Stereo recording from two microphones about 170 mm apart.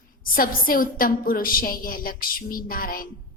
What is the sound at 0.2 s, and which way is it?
A woman's voice, 55° left (ahead or behind).